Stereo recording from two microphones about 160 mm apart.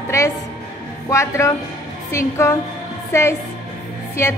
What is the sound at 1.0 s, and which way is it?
A woman's voice, 20° left (ahead or behind).